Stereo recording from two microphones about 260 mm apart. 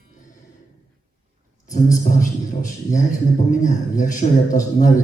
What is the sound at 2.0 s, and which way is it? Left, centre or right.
A man's voice, left.